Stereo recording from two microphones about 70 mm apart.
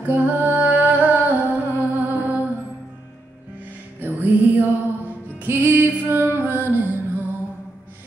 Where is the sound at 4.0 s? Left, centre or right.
Right.